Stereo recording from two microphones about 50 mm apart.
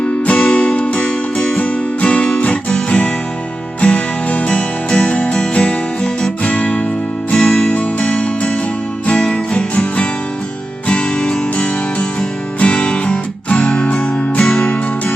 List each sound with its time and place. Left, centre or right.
0.0 s music: left